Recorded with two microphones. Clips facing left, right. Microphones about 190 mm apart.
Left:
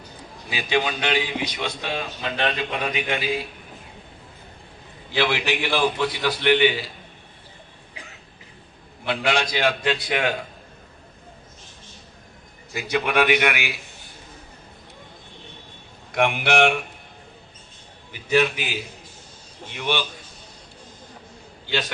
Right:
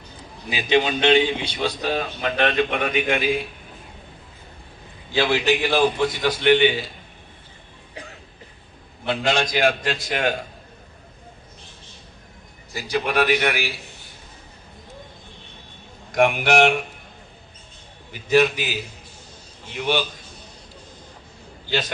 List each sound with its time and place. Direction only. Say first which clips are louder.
0.5 s a man's voice: right 4 dB; 20° right (ahead or behind); by 3.2 s 50° right (ahead or behind)
5.2 s a man's voice: right 3 dB; 45° right (ahead or behind)
9.2 s a man's voice: right 2 dB; 45° right (ahead or behind)
12.7 s a man's voice: even; 35° right (ahead or behind)
16.1 s a man's voice: right 3 dB; 40° right (ahead or behind)
18.1 s a man's voice: right 3 dB; 40° right (ahead or behind)
19.7 s a man's voice: right 3 dB; 40° right (ahead or behind)